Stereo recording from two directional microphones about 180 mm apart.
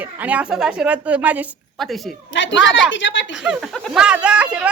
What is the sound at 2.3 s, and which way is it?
Speech, 90° left.